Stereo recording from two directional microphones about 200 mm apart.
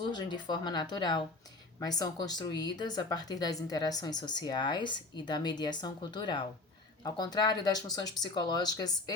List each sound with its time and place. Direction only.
0.1 s speech: 20° left (ahead or behind)